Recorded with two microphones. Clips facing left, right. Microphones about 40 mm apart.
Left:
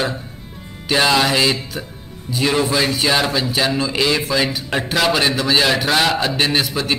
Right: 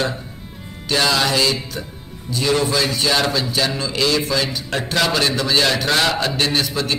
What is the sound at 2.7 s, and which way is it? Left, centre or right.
A man's voice, centre.